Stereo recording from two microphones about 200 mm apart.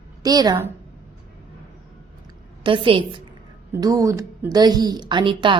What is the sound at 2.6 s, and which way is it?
A woman's voice, 25° right (ahead or behind).